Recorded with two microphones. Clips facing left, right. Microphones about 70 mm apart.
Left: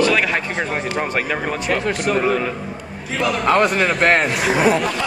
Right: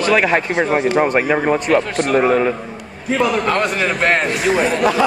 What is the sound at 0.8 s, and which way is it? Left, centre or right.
Speech, centre.